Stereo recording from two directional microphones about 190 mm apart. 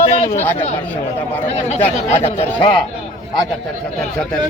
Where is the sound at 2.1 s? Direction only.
35° left (ahead or behind).